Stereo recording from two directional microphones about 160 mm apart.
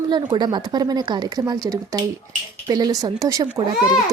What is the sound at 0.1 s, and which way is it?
Speech, 25° right (ahead or behind).